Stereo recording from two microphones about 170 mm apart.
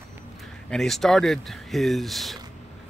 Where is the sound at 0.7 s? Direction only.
Centre (ahead or behind).